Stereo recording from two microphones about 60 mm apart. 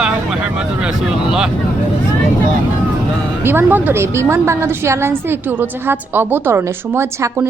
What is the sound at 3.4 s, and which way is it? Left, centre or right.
Speech, right.